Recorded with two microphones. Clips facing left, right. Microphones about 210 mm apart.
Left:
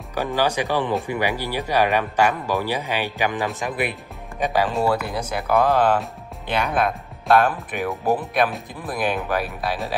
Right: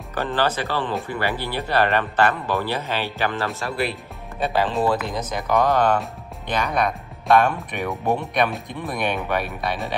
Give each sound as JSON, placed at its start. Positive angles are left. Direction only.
{"t": 0.1, "sound": "speech", "side_deg": 10}